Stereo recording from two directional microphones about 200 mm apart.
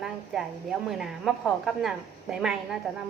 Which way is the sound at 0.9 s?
Centre (ahead or behind).